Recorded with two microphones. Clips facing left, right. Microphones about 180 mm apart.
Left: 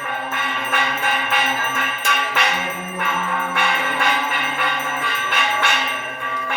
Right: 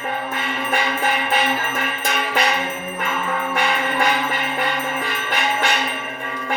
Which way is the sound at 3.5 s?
40° right (ahead or behind).